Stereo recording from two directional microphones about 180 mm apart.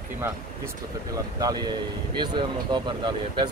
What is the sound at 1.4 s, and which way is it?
Speech, 20° right (ahead or behind).